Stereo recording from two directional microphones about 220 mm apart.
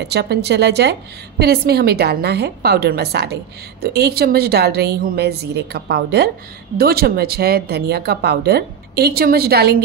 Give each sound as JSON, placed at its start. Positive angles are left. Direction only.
{"t": 0.0, "sound": "speech", "side_deg": -50}